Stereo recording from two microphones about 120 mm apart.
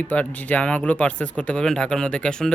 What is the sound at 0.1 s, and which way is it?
A woman's voice, 10° left (ahead or behind).